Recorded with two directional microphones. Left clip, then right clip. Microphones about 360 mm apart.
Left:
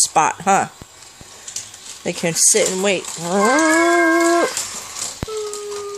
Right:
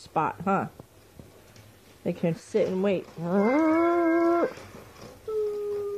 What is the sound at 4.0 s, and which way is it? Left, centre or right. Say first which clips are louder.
Dog: left 8 dB; centre.